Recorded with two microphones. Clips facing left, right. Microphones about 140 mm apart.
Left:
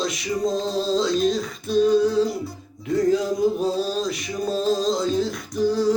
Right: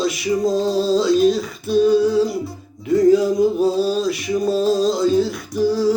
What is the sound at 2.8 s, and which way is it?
Male singing, 5° right (ahead or behind).